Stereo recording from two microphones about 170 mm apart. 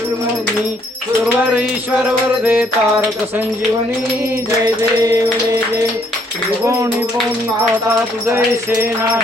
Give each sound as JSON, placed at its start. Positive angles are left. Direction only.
{"t": 1.5, "sound": "music", "side_deg": -10}
{"t": 6.7, "sound": "music", "side_deg": -20}
{"t": 8.3, "sound": "music", "side_deg": -15}